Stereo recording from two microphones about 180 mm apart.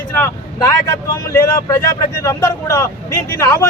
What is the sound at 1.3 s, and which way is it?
Speech, 15° left (ahead or behind).